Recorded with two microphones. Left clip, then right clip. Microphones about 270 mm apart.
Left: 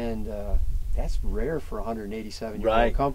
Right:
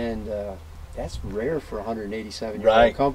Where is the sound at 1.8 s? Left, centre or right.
Left.